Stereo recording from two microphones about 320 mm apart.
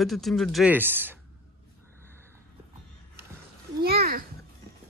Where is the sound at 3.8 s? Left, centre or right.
Right.